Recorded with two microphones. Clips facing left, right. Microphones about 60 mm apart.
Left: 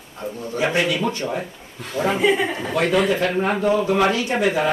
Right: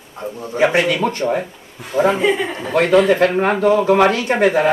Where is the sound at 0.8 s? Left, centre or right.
Right.